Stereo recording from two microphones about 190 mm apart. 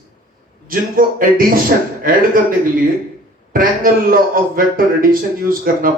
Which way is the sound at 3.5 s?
50° right (ahead or behind).